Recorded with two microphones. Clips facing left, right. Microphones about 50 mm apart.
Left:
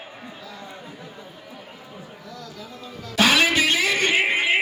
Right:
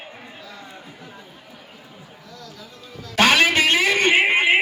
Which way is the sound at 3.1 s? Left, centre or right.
Right.